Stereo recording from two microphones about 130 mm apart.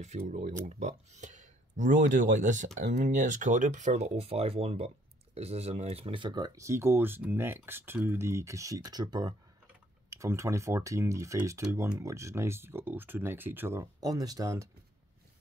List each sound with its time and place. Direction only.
0.0 s speech: 65° right (ahead or behind)
0.7 s speech: 60° right (ahead or behind); by 13.8 s 15° right (ahead or behind)
14.0 s speech: 30° right (ahead or behind)